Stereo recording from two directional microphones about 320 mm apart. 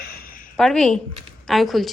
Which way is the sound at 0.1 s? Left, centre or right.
Left.